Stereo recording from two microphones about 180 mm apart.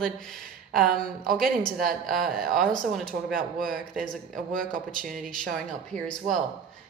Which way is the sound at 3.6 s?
50° right (ahead or behind).